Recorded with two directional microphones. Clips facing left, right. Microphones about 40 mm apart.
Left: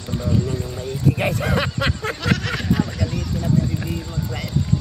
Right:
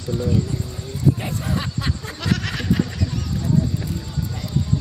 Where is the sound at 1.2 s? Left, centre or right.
Left.